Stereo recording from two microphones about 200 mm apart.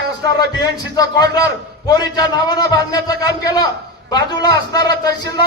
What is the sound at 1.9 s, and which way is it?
A man's voice, 20° left (ahead or behind).